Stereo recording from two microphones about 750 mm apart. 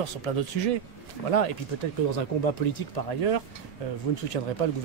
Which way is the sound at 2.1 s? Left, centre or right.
Left.